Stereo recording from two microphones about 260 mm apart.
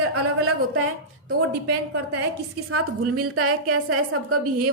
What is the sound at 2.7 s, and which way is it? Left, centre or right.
A woman's voice, right.